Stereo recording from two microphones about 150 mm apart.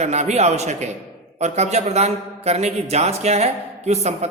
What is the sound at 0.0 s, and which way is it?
A man's voice, 50° right (ahead or behind).